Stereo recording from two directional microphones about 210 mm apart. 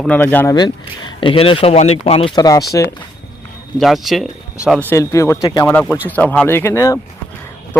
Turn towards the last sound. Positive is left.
turn(degrees=15)  # may be behind; listen again after turning